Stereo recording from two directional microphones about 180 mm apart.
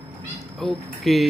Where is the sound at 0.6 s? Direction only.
Centre (ahead or behind).